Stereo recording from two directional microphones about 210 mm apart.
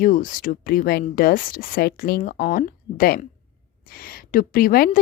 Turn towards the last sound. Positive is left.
turn(degrees=45)  # may be behind; listen again after turning